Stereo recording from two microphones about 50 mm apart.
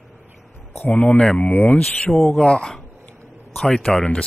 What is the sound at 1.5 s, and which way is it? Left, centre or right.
Speech, left.